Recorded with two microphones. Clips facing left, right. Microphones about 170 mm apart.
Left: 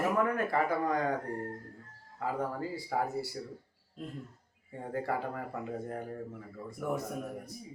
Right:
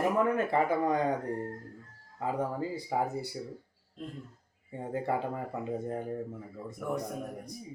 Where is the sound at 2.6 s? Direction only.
20° right (ahead or behind).